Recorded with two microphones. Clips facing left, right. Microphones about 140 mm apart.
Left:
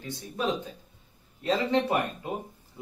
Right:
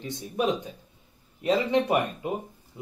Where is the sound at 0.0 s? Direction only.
15° right (ahead or behind).